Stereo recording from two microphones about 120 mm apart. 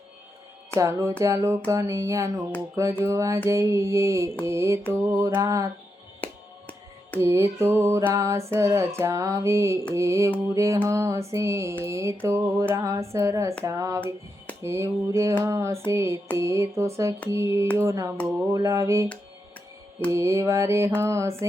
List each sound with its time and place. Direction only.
0.8 s speech: 25° right (ahead or behind)
6.2 s music: 15° left (ahead or behind)
7.2 s speech: 25° right (ahead or behind)
20.1 s speech: 25° right (ahead or behind)